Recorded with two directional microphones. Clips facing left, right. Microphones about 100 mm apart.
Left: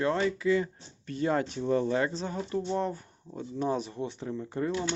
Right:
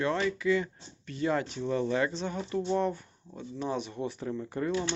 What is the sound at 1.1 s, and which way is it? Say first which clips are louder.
Speech: left 1 dB; 40° left (ahead or behind).